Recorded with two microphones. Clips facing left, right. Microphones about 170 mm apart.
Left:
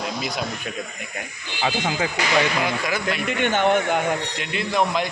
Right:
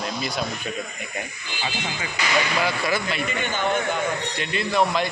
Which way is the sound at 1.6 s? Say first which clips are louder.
Left 7 dB; 90° left.